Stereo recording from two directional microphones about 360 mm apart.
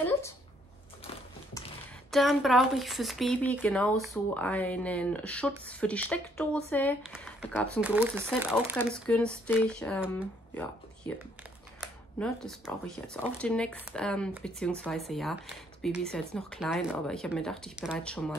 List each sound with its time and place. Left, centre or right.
2.0 s speech: centre